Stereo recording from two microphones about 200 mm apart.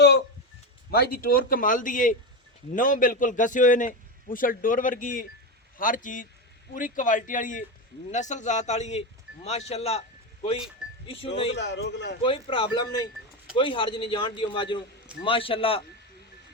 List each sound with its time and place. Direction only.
0.9 s a man's voice: 50° left (ahead or behind); by 10.0 s 30° left (ahead or behind)
11.0 s speech: 25° left (ahead or behind)
11.5 s a man's voice: 60° left (ahead or behind)
12.2 s speech: 25° left (ahead or behind)